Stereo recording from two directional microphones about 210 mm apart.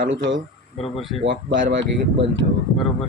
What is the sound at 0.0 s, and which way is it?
Speech, 65° right (ahead or behind).